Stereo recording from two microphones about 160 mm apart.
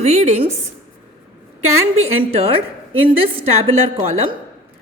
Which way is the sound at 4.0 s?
40° right (ahead or behind).